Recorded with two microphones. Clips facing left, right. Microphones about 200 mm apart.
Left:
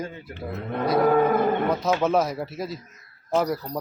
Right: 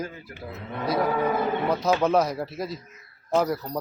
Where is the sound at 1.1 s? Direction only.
50° left (ahead or behind).